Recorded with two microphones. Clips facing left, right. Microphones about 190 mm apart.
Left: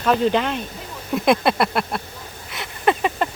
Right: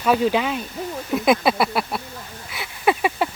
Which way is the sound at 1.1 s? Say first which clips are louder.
Even; centre (ahead or behind).